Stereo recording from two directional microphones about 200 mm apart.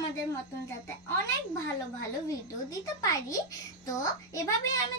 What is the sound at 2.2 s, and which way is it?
A child's voice, 15° left (ahead or behind).